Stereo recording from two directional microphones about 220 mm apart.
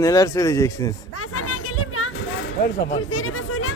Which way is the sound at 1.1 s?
80° left.